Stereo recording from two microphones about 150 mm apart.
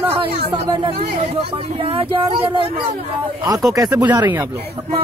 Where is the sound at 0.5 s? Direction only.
30° right (ahead or behind).